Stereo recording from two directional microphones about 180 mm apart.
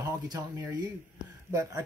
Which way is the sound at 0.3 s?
20° right (ahead or behind).